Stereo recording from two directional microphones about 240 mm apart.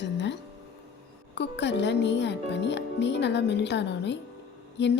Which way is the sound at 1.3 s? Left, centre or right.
Left.